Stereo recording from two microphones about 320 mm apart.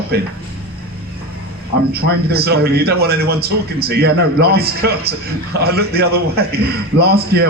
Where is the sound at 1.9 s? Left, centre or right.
Right.